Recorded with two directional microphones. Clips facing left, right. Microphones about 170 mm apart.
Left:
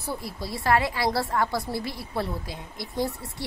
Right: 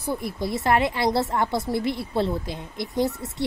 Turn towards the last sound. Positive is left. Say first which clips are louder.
# right 4 dB
turn(degrees=-20)  # may be behind; listen again after turning